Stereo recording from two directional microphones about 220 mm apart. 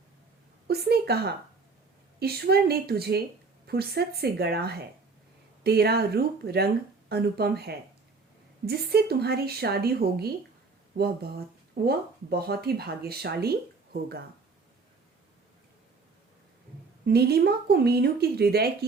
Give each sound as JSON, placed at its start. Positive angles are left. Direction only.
{"t": 0.7, "sound": "speech", "side_deg": -45}
{"t": 17.1, "sound": "speech", "side_deg": -45}